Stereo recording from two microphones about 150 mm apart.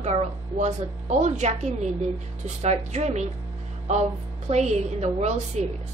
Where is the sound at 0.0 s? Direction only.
50° right (ahead or behind).